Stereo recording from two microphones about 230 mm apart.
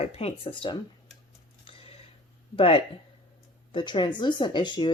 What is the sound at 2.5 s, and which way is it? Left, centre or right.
Speech, left.